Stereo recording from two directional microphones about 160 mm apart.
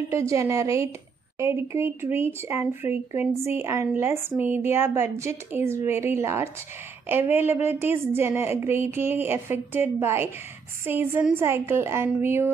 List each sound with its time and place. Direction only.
0.1 s a woman's voice: 20° right (ahead or behind)